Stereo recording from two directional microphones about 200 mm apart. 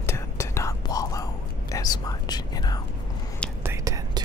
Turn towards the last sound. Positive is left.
turn(degrees=-15)  # may be behind; listen again after turning